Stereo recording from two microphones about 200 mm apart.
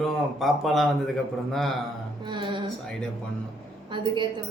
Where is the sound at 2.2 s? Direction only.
20° right (ahead or behind).